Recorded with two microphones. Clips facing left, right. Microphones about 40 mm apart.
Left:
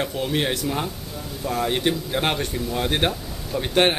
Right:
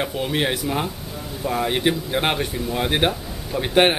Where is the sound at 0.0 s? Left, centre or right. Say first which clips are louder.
Right 1 dB; centre.